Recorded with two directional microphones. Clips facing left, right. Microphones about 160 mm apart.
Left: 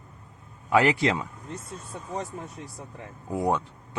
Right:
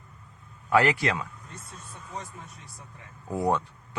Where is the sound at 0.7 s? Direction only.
20° left (ahead or behind).